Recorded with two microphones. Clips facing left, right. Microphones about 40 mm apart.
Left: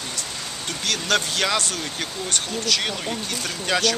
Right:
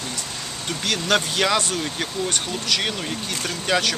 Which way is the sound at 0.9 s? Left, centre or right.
Centre.